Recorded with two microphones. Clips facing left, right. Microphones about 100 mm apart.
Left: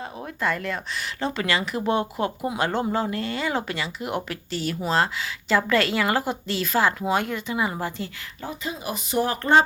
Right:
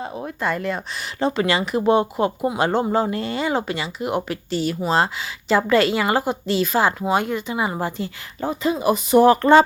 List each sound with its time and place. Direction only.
0.0 s speech: 15° right (ahead or behind)
8.4 s speech: 50° right (ahead or behind); by 9.6 s 90° right